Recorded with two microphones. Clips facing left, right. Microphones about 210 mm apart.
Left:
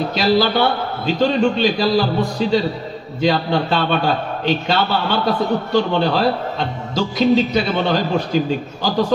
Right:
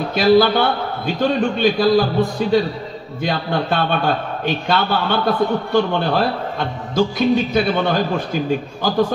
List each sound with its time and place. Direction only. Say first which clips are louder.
0.1 s a man's voice: right 5 dB; 55° right (ahead or behind)